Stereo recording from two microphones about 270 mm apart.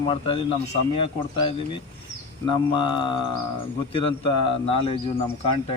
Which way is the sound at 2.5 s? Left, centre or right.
Centre.